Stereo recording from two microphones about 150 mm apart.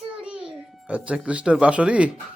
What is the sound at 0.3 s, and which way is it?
A child's voice, 5° right (ahead or behind).